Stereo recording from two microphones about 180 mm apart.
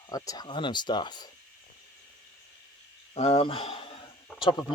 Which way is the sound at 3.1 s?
30° left (ahead or behind).